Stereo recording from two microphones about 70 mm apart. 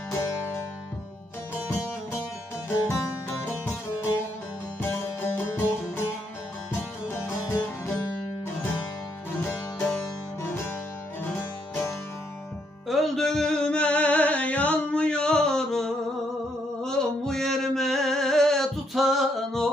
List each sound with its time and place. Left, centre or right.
0.1 s music: left
4.8 s music: left
7.4 s music: left
12.8 s music: centre
16.8 s a sound: centre